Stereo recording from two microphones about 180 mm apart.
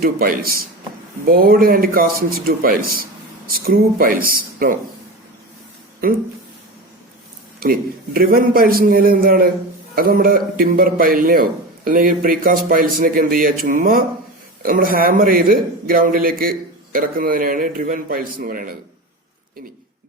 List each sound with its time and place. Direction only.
0.0 s a man's voice: 55° right (ahead or behind)
7.6 s a man's voice: 55° right (ahead or behind)